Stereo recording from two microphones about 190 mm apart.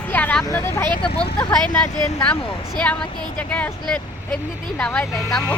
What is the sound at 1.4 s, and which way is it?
Speech, 5° left (ahead or behind).